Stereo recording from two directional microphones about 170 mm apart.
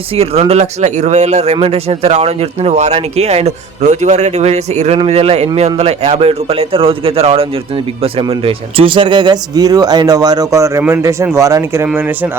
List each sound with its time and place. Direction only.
0.2 s speech: 40° right (ahead or behind); by 12.3 s 10° right (ahead or behind)